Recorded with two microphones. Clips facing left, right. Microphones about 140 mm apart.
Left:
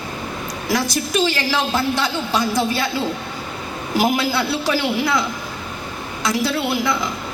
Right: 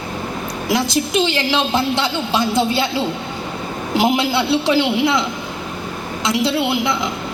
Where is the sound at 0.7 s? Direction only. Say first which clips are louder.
Right 2 dB; 25° right (ahead or behind).